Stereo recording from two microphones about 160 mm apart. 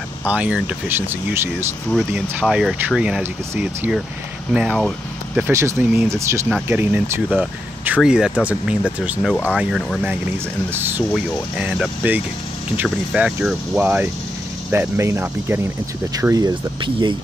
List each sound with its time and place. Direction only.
0.3 s speech: 5° right (ahead or behind)
1.9 s speech: centre (ahead or behind)
5.4 s speech: 15° right (ahead or behind); by 9.9 s centre (ahead or behind)
10.7 s speech: 15° right (ahead or behind)